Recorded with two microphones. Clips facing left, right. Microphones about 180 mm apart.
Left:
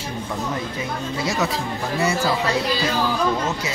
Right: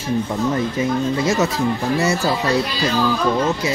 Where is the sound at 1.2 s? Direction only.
45° right (ahead or behind).